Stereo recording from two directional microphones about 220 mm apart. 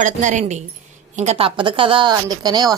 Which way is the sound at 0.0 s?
35° right (ahead or behind).